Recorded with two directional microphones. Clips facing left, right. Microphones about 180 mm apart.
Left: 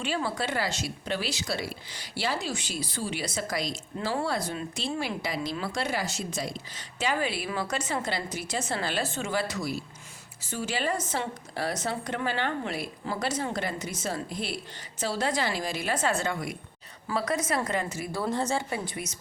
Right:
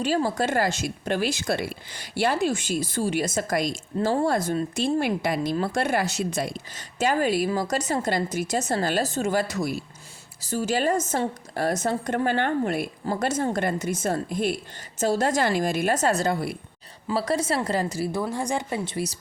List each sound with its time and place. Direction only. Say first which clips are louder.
0.0 s a woman's voice: right 6 dB; 40° right (ahead or behind)
18.3 s speech: right 1 dB; 10° right (ahead or behind); by 19.1 s 30° right (ahead or behind)